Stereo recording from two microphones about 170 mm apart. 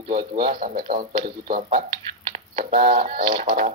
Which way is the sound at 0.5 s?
55° right (ahead or behind).